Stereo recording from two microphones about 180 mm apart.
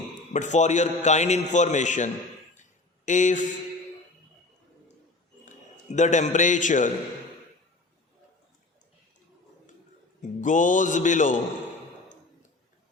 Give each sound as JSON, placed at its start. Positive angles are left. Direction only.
{"t": 0.3, "sound": "a man's voice", "side_deg": 40}
{"t": 3.1, "sound": "speech", "side_deg": 45}
{"t": 5.5, "sound": "a man's voice", "side_deg": 40}
{"t": 10.2, "sound": "a man's voice", "side_deg": 45}